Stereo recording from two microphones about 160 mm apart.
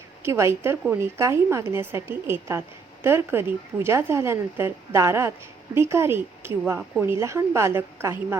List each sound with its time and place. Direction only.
0.2 s a woman's voice: 15° right (ahead or behind)
6.7 s a woman's voice: 5° right (ahead or behind)
7.1 s a woman's voice: 15° right (ahead or behind)